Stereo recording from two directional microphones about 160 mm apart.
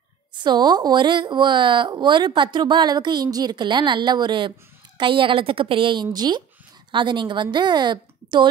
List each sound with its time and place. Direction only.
0.4 s a woman's voice: 25° right (ahead or behind)